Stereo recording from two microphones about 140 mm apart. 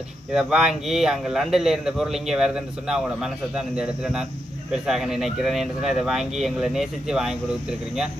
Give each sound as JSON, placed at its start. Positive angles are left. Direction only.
{"t": 0.3, "sound": "a man's voice", "side_deg": -5}